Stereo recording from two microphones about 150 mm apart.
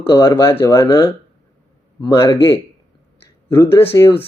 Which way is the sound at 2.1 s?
20° left (ahead or behind).